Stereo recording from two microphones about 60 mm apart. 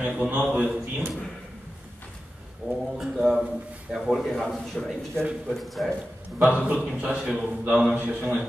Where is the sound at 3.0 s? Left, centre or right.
Centre.